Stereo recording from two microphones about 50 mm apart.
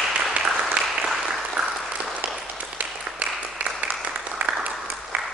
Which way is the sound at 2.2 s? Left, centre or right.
Right.